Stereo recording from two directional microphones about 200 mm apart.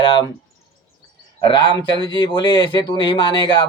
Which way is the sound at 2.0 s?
20° left (ahead or behind).